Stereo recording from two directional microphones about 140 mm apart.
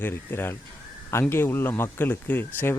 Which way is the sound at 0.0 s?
15° left (ahead or behind).